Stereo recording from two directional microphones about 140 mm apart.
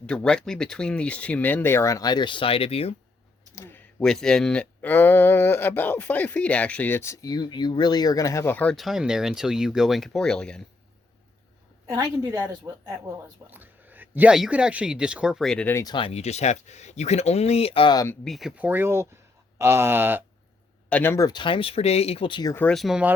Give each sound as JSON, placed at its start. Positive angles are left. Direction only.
{"t": 0.0, "sound": "speech", "side_deg": 5}
{"t": 3.5, "sound": "typing", "side_deg": 15}
{"t": 4.0, "sound": "speech", "side_deg": 5}
{"t": 8.7, "sound": "speech", "side_deg": 0}
{"t": 11.9, "sound": "a woman's voice", "side_deg": -20}
{"t": 15.6, "sound": "speech", "side_deg": 20}
{"t": 15.9, "sound": "speech", "side_deg": 40}
{"t": 17.9, "sound": "speech", "side_deg": 20}
{"t": 18.3, "sound": "speech", "side_deg": 0}
{"t": 20.9, "sound": "speech", "side_deg": 15}
{"t": 21.2, "sound": "speech", "side_deg": 35}
{"t": 22.7, "sound": "speech", "side_deg": 0}